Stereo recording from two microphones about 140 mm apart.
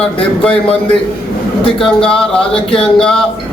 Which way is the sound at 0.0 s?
10° left (ahead or behind).